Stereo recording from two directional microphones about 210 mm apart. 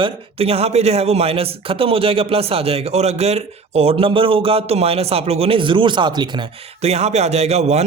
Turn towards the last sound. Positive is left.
turn(degrees=-30)  # may be behind; listen again after turning